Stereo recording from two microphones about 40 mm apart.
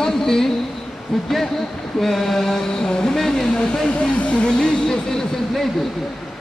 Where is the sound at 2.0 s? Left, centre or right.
Centre.